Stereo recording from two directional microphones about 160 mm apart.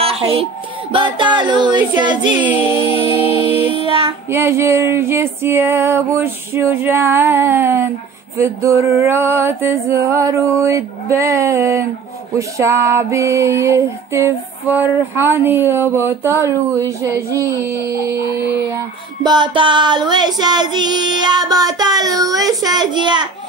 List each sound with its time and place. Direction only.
0.0 s music: 35° right (ahead or behind)
0.9 s child singing: 30° right (ahead or behind)
3.3 s music: 15° right (ahead or behind)
3.7 s child singing: 35° right (ahead or behind)
4.3 s female singing: 15° right (ahead or behind)
16.3 s child singing: 20° right (ahead or behind)
19.2 s child singing: 30° right (ahead or behind)